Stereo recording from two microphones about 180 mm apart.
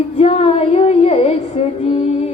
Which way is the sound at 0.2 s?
35° left (ahead or behind).